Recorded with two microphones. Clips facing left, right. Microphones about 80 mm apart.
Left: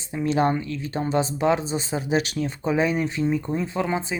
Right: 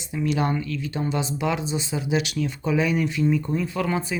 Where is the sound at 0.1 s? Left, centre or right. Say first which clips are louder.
Left 2 dB; left.